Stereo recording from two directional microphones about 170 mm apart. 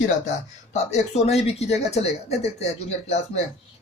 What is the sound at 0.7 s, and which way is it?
Speech, 40° left (ahead or behind).